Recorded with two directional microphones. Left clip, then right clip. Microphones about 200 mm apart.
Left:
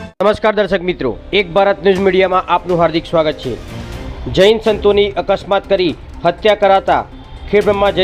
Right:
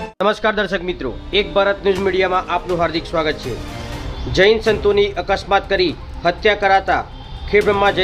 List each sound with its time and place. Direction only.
0.2 s speech: 25° left (ahead or behind)
4.4 s speech: 20° left (ahead or behind)